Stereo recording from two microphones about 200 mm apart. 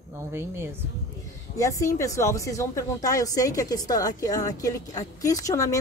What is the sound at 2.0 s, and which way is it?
A woman's voice, 15° left (ahead or behind).